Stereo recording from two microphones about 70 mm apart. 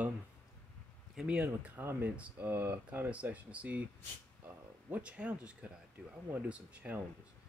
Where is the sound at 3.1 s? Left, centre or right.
Centre.